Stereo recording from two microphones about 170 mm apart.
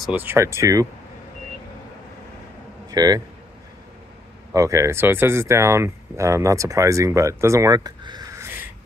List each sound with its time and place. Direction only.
0.0 s speech: 10° right (ahead or behind)
2.9 s speech: 20° right (ahead or behind)
4.6 s speech: 20° right (ahead or behind)